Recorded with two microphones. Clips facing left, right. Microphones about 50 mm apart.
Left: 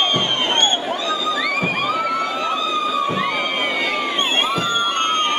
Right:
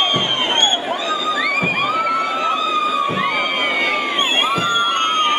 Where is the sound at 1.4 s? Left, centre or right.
Centre.